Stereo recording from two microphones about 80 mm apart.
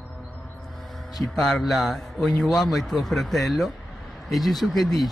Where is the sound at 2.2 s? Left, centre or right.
Centre.